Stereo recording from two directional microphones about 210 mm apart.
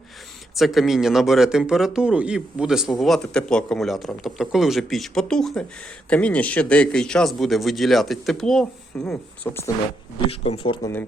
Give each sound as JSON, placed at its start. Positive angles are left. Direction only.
{"t": 0.5, "sound": "a man's voice", "side_deg": 0}
{"t": 10.2, "sound": "speech", "side_deg": 30}